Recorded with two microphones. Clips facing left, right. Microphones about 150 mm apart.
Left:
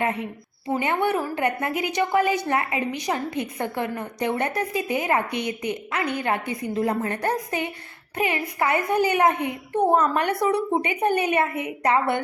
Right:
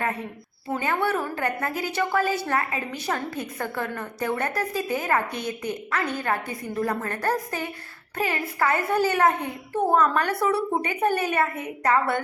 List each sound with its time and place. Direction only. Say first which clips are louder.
0.0 s a child's voice: left 3 dB; 20° left (ahead or behind)